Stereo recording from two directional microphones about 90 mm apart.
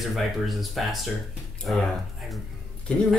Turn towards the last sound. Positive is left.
turn(degrees=10)  # may be behind; listen again after turning